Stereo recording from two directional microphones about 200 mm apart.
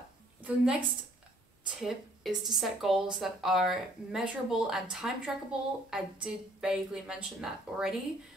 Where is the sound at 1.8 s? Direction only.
Centre (ahead or behind).